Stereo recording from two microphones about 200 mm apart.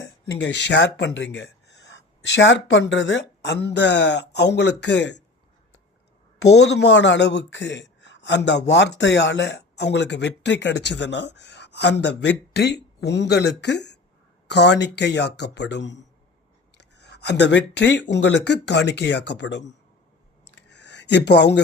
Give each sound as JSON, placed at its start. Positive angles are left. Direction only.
{"t": 0.3, "sound": "speech", "side_deg": 60}
{"t": 6.5, "sound": "speech", "side_deg": 60}
{"t": 20.6, "sound": "a sound", "side_deg": 60}